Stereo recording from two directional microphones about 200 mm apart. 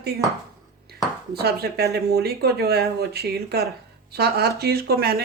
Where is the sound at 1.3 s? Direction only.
55° right (ahead or behind).